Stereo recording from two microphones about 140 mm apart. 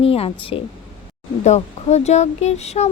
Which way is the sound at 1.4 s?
55° left (ahead or behind).